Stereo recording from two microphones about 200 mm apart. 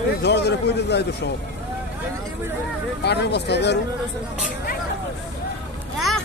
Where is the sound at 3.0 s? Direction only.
55° left (ahead or behind).